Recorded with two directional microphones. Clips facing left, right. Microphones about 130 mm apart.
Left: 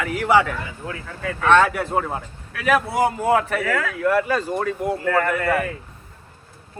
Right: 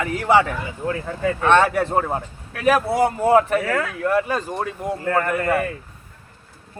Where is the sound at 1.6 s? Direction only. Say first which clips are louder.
Right 3 dB; 35° right (ahead or behind).